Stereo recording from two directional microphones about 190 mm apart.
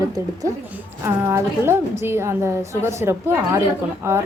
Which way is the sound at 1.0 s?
15° right (ahead or behind).